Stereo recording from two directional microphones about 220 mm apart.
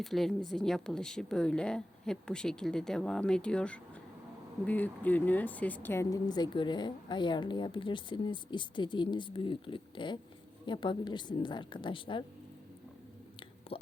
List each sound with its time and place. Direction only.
0.0 s speech: centre (ahead or behind); by 12.2 s 20° left (ahead or behind)